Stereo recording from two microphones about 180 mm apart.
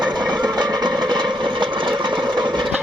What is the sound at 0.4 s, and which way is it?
Vehicle, 25° right (ahead or behind).